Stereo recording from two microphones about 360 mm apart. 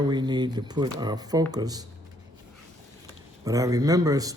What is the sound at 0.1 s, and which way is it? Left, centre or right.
Speech, centre.